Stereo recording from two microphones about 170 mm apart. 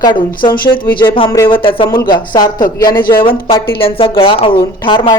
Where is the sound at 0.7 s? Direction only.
30° left (ahead or behind).